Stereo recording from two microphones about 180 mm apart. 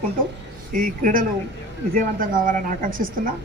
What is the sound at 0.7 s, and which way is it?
A woman's voice, 50° right (ahead or behind).